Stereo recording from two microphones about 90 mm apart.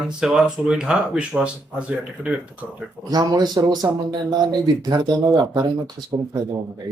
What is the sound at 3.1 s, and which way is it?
Speech, 45° right (ahead or behind).